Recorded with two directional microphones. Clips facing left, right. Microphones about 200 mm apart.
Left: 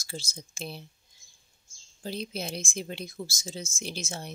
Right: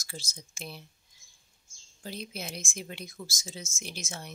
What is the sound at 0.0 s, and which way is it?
Speech, 30° left (ahead or behind).